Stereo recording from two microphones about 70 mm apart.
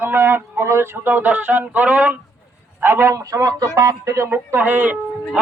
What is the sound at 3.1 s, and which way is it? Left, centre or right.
Speech, right.